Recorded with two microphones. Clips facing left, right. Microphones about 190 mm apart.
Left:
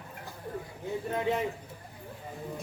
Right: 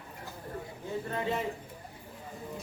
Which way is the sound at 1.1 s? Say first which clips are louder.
Left 3 dB; 15° left (ahead or behind).